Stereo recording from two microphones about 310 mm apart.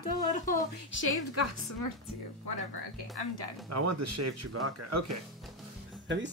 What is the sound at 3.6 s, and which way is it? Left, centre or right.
Speech, right.